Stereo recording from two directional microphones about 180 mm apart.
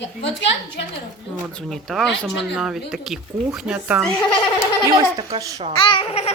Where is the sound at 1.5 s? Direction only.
Centre (ahead or behind).